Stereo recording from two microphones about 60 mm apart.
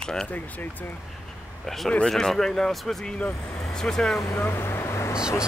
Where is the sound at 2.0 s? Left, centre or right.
Centre.